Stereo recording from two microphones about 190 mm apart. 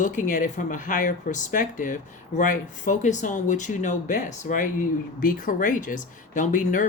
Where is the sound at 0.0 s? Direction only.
40° left (ahead or behind).